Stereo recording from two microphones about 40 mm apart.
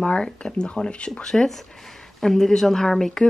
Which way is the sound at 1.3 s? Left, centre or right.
Centre.